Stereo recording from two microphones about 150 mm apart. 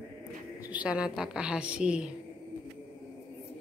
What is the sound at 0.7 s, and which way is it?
A woman's voice, 5° right (ahead or behind).